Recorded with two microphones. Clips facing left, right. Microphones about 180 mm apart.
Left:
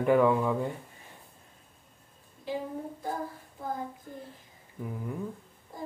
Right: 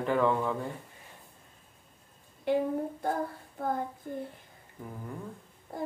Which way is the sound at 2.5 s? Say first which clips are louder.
Right 7 dB; 60° right (ahead or behind).